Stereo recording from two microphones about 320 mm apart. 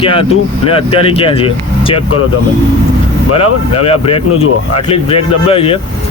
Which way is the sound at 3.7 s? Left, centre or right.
Centre.